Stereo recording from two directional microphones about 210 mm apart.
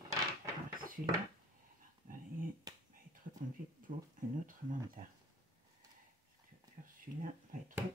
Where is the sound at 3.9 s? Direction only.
40° right (ahead or behind).